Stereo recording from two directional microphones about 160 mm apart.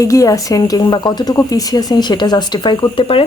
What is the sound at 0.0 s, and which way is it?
Speech, 20° left (ahead or behind).